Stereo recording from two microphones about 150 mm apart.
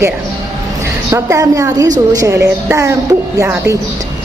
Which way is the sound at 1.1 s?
20° right (ahead or behind).